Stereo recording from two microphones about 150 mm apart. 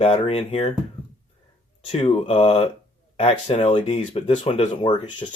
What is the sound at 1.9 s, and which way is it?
Speech, 40° left (ahead or behind).